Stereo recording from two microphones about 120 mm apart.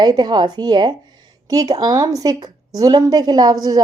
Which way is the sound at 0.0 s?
35° right (ahead or behind).